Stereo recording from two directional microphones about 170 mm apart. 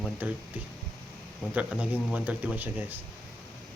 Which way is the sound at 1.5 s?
10° right (ahead or behind).